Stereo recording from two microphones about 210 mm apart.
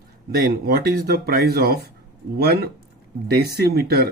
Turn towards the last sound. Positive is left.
turn(degrees=-50)  # may be behind; listen again after turning